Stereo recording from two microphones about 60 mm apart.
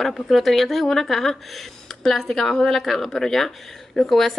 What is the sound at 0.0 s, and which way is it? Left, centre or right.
A woman's voice, centre.